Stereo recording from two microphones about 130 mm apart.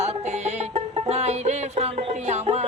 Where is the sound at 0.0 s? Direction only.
55° right (ahead or behind).